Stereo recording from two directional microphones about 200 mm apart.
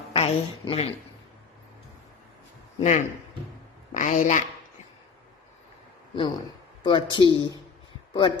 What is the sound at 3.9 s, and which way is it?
Speech, 40° left (ahead or behind).